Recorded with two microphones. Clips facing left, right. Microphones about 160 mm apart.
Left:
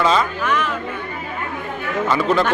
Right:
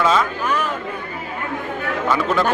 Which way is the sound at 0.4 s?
35° right (ahead or behind).